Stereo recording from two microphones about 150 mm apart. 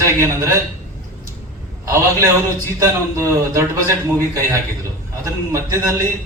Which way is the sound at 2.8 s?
20° right (ahead or behind).